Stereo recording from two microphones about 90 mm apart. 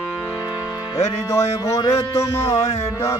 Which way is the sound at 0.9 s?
40° left (ahead or behind).